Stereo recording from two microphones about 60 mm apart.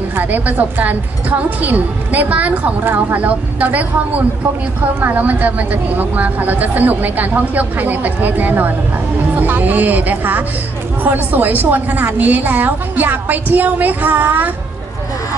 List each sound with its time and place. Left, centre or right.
0.1 s a woman's voice: right
5.0 s a woman's voice: right